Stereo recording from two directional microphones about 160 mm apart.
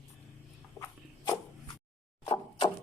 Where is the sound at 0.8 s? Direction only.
Centre (ahead or behind).